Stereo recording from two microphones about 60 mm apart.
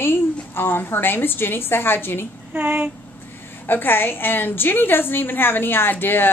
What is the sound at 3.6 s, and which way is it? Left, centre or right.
A woman's voice, left.